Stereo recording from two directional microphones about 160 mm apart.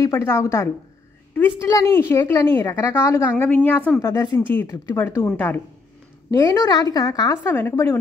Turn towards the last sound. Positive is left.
turn(degrees=15)  # may be behind; listen again after turning